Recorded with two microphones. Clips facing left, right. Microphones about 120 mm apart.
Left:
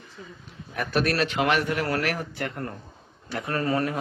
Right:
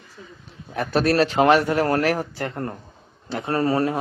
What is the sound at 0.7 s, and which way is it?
A man's voice, 30° right (ahead or behind).